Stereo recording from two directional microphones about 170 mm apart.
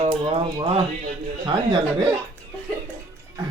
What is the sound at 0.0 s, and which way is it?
Speech, 35° right (ahead or behind).